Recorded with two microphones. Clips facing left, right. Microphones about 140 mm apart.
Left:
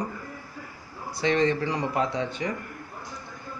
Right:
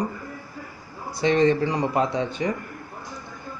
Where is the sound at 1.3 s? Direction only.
30° right (ahead or behind).